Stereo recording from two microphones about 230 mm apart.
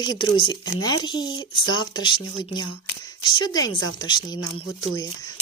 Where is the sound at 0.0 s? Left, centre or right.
Centre.